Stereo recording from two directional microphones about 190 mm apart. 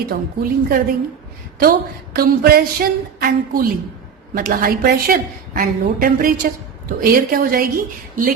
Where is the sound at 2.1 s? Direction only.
50° right (ahead or behind).